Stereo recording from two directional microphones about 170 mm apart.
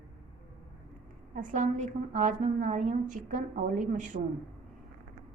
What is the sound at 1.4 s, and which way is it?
A woman's voice, 50° right (ahead or behind).